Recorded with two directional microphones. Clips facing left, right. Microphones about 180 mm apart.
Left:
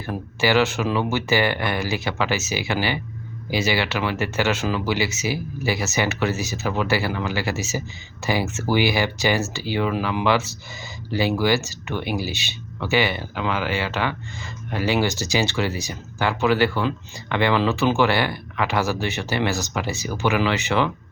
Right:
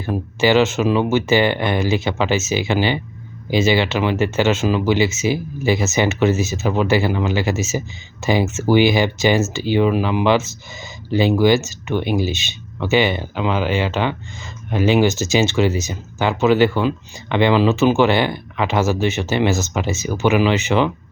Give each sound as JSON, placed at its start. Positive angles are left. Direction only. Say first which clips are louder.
{"t": 0.0, "sound": "speech", "louder": "right 5 dB", "side_deg": -20}